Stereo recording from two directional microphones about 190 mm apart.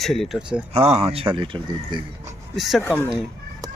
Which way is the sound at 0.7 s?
35° right (ahead or behind).